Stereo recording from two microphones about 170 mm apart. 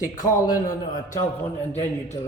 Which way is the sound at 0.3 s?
25° left (ahead or behind).